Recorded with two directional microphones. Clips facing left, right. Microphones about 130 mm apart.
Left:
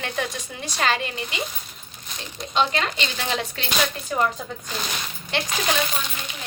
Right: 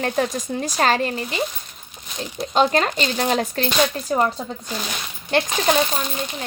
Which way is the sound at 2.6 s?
40° right (ahead or behind).